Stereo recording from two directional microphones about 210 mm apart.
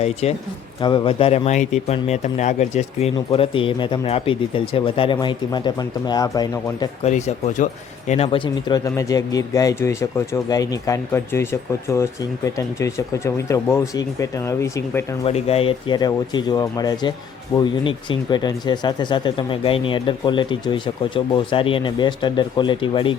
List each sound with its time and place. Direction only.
0.0 s speech: 30° left (ahead or behind)
7.0 s speech: 30° left (ahead or behind); by 14.7 s 15° left (ahead or behind)
15.2 s speech: 30° left (ahead or behind)